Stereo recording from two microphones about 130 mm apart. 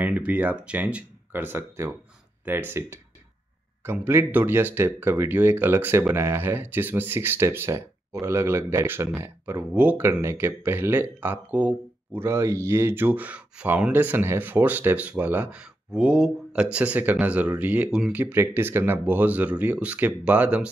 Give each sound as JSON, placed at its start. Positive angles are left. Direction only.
{"t": 0.0, "sound": "speech", "side_deg": -10}
{"t": 18.2, "sound": "speech", "side_deg": -20}